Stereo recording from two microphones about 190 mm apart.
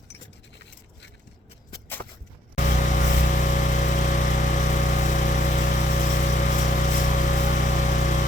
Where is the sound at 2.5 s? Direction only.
40° left (ahead or behind).